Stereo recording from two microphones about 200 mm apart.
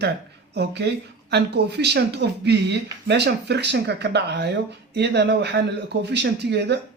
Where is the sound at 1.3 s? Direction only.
55° right (ahead or behind).